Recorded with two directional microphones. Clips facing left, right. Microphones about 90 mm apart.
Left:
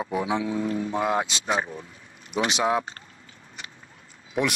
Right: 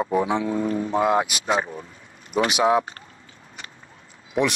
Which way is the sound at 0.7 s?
25° right (ahead or behind).